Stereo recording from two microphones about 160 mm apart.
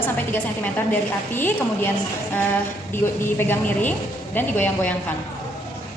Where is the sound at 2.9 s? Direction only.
15° left (ahead or behind).